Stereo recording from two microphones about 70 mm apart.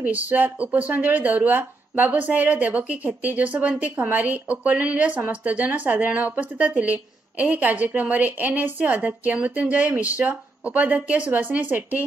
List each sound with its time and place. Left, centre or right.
0.0 s speech: right